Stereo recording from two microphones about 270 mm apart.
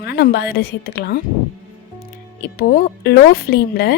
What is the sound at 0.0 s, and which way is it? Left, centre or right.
Speech, left.